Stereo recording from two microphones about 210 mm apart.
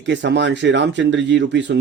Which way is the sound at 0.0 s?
55° right (ahead or behind).